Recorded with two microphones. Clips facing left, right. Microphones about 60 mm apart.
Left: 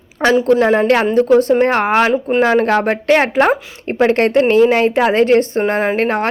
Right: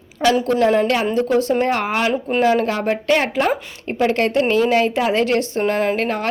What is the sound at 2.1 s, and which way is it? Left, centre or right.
Speech, centre.